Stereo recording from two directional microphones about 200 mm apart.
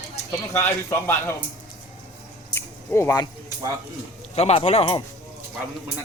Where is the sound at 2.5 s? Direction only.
10° left (ahead or behind).